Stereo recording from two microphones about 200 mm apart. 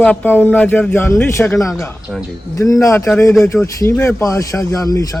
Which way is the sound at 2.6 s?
15° left (ahead or behind).